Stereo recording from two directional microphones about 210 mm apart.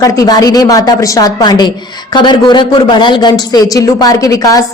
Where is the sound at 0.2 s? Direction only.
15° left (ahead or behind).